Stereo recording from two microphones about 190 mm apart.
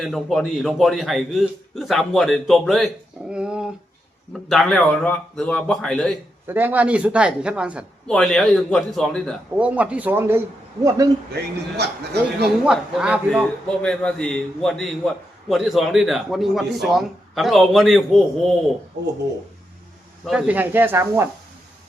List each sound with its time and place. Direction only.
0.0 s speech: centre (ahead or behind)
6.5 s speech: 10° right (ahead or behind)
11.8 s a man's voice: 60° right (ahead or behind)
12.6 s speech: 5° right (ahead or behind)
20.2 s speech: 5° right (ahead or behind)